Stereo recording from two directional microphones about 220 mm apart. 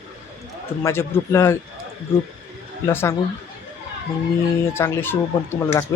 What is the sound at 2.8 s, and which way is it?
Speech, 10° left (ahead or behind).